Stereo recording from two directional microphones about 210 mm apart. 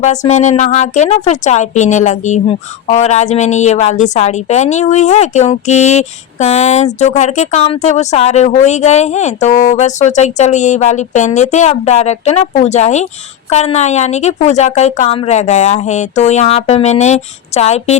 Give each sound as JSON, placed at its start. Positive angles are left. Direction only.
{"t": 0.3, "sound": "speech", "side_deg": 35}